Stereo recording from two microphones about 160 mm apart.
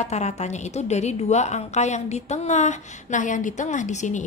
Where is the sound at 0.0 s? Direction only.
45° left (ahead or behind).